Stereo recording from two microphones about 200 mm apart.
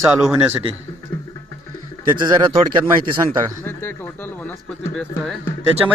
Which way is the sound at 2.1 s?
20° right (ahead or behind).